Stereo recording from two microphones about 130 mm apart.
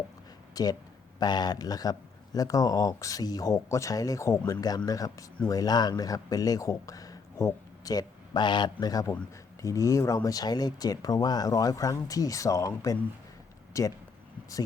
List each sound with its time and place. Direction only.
0.5 s speech: 30° left (ahead or behind)